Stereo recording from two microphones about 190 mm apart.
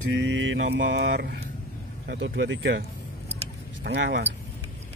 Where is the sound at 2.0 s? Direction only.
75° right (ahead or behind).